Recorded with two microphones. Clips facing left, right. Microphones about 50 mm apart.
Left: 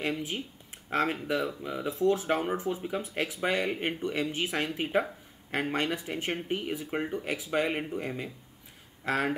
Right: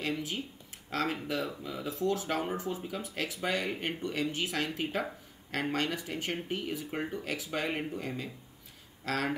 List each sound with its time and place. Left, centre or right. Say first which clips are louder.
0.0 s speech: left 2 dB; left